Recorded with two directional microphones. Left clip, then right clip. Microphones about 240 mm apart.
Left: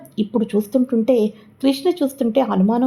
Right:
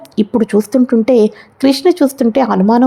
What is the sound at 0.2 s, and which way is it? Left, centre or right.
Speech, right.